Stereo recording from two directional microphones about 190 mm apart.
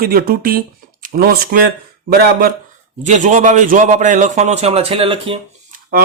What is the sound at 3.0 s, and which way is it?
Speech, 40° right (ahead or behind).